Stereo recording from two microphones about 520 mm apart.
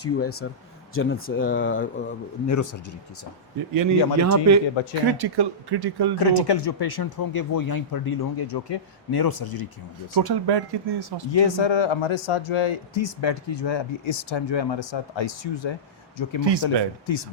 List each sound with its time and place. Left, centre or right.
0.0 s speech: left
2.5 s speech: left
3.7 s speech: right
5.0 s speech: right
6.1 s speech: left
10.2 s speech: right
11.3 s speech: left
16.4 s speech: right